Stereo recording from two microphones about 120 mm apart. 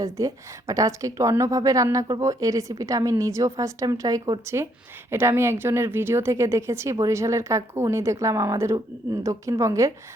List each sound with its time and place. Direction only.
0.0 s a woman's voice: 25° right (ahead or behind)